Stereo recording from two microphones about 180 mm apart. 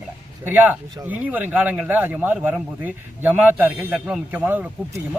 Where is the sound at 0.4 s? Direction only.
10° right (ahead or behind).